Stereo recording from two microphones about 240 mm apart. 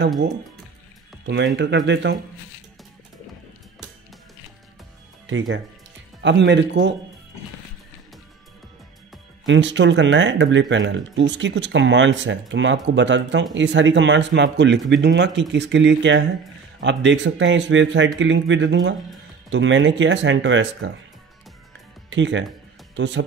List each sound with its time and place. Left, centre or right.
1.2 s speech: right
6.2 s speech: right
9.5 s speech: right
22.1 s speech: right